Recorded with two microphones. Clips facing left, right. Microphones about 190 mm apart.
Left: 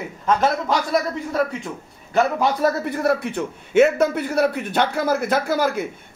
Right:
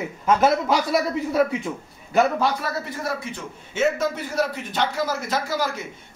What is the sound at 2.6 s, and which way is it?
A man's voice, 60° left (ahead or behind).